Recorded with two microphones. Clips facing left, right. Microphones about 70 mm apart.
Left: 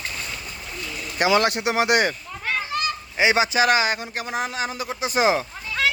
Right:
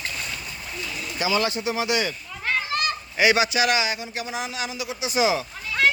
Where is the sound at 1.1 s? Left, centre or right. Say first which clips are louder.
Left 5 dB; left.